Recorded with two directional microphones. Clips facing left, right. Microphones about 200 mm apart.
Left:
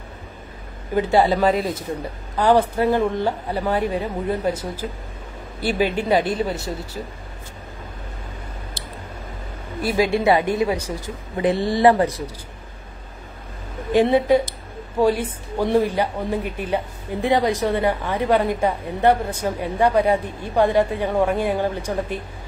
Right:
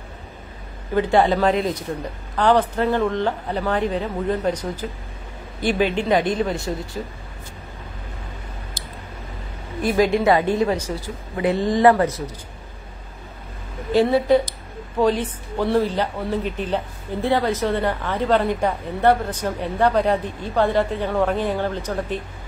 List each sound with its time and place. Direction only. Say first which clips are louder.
0.9 s speech: even; 10° left (ahead or behind)
9.8 s a woman's voice: right 2 dB; 10° left (ahead or behind)
13.9 s speech: even; 15° left (ahead or behind)